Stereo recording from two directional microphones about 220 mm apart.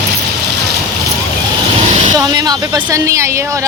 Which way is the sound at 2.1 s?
15° right (ahead or behind).